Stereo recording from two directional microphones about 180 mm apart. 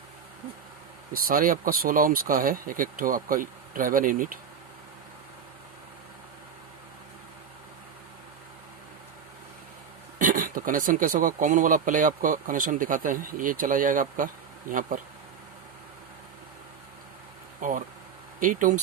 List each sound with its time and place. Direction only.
1.1 s speech: 50° right (ahead or behind)
10.2 s speech: 50° right (ahead or behind)
17.6 s speech: 45° right (ahead or behind)